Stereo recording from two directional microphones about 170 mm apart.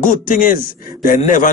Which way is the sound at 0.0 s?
50° left (ahead or behind).